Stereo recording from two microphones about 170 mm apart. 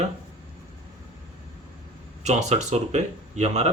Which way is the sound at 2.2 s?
40° right (ahead or behind).